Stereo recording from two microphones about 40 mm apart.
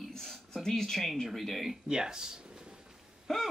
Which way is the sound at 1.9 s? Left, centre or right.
Centre.